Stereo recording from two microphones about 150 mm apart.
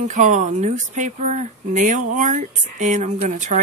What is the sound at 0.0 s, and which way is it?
Speech, 55° right (ahead or behind).